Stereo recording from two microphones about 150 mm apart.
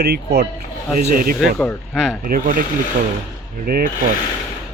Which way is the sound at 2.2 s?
70° right (ahead or behind).